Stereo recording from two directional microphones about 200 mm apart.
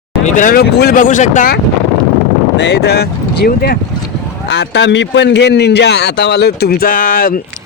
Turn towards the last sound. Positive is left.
turn(degrees=45)  # may be behind; listen again after turning